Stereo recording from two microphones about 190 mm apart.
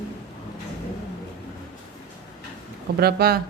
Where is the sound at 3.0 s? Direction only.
55° right (ahead or behind).